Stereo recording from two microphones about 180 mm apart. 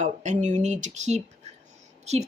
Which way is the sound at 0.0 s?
40° right (ahead or behind).